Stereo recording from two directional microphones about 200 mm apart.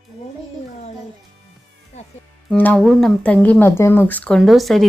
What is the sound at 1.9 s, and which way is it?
Speech, 35° left (ahead or behind).